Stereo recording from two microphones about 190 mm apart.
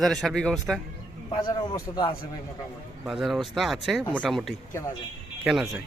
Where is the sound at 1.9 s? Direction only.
20° left (ahead or behind).